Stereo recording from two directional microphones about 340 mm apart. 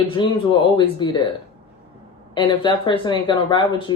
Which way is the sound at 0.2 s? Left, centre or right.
Centre.